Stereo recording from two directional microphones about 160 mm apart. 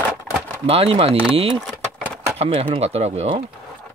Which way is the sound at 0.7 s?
35° right (ahead or behind).